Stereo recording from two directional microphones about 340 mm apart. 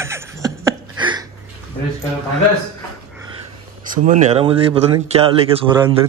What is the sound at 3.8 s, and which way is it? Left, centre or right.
Speech, right.